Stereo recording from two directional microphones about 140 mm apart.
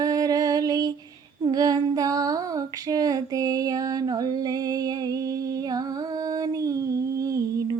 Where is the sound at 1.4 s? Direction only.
25° right (ahead or behind).